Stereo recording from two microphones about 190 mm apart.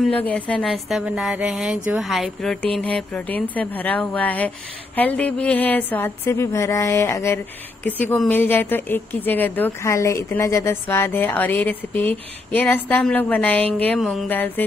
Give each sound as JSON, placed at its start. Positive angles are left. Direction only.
{"t": 0.0, "sound": "a woman's voice", "side_deg": 5}